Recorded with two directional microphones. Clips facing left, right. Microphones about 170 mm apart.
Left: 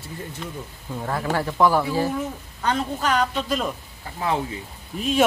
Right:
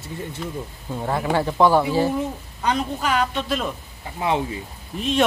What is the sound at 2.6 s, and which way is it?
A woman's voice, 10° right (ahead or behind).